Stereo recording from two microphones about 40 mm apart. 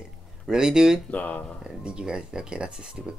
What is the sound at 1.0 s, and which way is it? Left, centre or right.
Speech, left.